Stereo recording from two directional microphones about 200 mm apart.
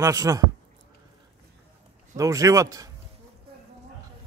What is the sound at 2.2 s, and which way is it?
Speech, 15° right (ahead or behind).